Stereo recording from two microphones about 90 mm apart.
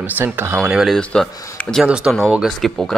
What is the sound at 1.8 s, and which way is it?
Speech, 10° right (ahead or behind).